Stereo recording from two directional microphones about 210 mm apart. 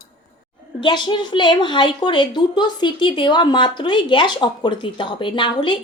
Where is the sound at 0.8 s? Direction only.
20° left (ahead or behind).